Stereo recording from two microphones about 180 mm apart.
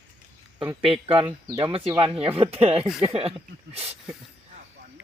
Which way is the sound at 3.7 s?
35° right (ahead or behind).